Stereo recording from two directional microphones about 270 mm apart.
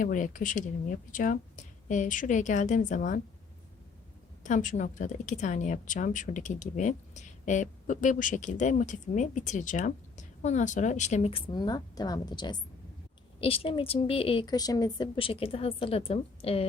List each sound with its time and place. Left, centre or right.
0.0 s speech: left
4.4 s speech: left